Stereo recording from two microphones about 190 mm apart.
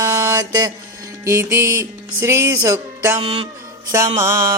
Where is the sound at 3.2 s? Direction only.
30° right (ahead or behind).